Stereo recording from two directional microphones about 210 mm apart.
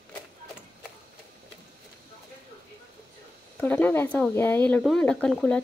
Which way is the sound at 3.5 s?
10° left (ahead or behind).